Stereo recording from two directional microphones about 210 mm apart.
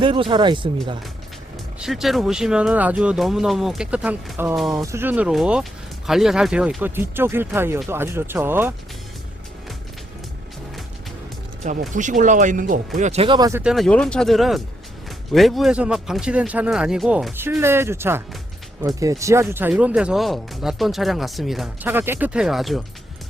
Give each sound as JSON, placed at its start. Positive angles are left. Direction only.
{"t": 0.0, "sound": "speech", "side_deg": -25}
{"t": 1.8, "sound": "speech", "side_deg": 0}
{"t": 11.6, "sound": "speech", "side_deg": -35}
{"t": 13.6, "sound": "speech", "side_deg": 0}